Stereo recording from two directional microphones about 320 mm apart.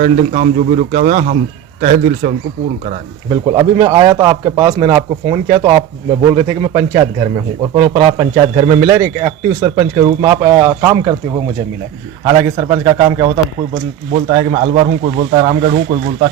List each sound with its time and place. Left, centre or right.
0.0 s a man's voice: right
12.2 s a man's voice: centre